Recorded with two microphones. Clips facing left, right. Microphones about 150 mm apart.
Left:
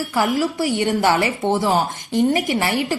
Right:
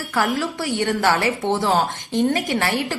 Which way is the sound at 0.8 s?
15° left (ahead or behind).